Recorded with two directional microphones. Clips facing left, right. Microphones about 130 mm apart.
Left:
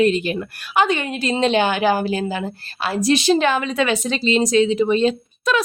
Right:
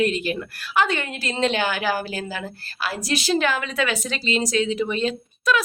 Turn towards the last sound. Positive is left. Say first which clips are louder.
# left 2 dB
turn(degrees=25)  # may be behind; listen again after turning